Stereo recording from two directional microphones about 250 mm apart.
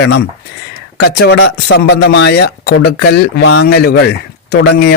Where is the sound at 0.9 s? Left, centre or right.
Left.